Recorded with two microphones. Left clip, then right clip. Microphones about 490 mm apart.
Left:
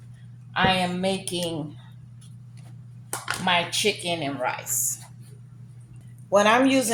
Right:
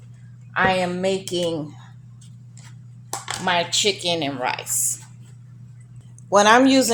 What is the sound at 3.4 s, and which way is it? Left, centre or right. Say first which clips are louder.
Speech: right 3 dB; left.